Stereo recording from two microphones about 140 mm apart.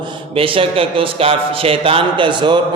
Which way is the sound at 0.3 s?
40° right (ahead or behind).